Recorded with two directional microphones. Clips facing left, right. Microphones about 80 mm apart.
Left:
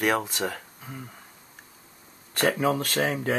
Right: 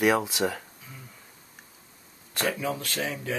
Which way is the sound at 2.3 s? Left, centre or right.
Left.